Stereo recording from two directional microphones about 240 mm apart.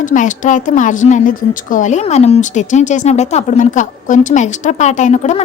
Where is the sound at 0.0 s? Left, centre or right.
Left.